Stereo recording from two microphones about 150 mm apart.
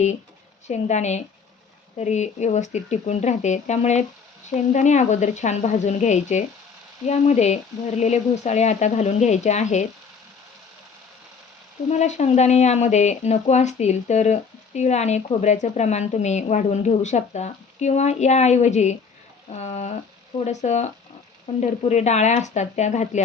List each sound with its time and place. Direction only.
0.7 s speech: 50° left (ahead or behind)
11.9 s speech: 50° left (ahead or behind)